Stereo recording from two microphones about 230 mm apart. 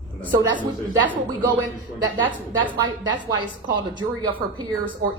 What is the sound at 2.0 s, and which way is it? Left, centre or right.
A woman's voice, right.